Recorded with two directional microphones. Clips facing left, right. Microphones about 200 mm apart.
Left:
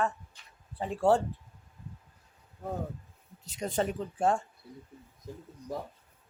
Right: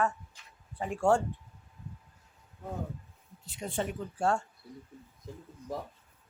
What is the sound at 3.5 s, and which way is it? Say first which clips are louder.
Speech: left 4 dB; 40° left (ahead or behind).